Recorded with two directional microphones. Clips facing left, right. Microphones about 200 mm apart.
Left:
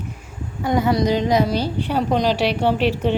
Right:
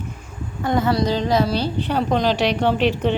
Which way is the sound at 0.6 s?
15° left (ahead or behind).